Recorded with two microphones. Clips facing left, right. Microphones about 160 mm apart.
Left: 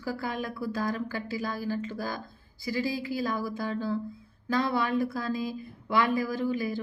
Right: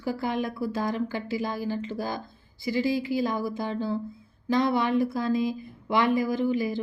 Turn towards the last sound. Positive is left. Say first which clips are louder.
# right 4 dB
turn(degrees=-20)  # may be behind; listen again after turning